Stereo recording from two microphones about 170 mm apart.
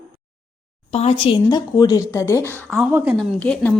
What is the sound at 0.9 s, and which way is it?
Speech, 40° left (ahead or behind).